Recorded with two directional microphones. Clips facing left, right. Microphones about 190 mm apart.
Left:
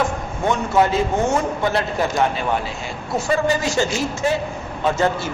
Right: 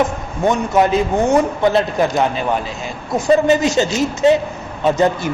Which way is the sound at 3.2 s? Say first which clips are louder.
Right 7 dB; 20° right (ahead or behind).